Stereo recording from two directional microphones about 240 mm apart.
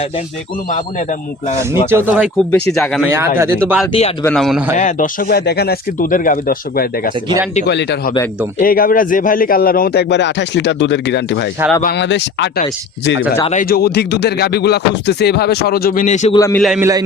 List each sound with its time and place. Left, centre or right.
1.9 s a man's voice: centre
3.1 s speech: centre
4.2 s a man's voice: centre
4.8 s speech: left
13.4 s speech: left
16.3 s a man's voice: centre
16.6 s a man's voice: centre